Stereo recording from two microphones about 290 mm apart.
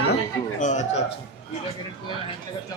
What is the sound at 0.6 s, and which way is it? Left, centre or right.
Speech, left.